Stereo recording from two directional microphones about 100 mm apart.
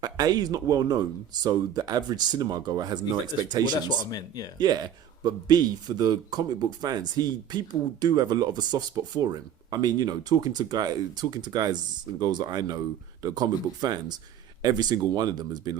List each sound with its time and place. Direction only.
0.0 s speech: 40° right (ahead or behind)
3.8 s speech: 40° left (ahead or behind)
4.5 s speech: 45° right (ahead or behind)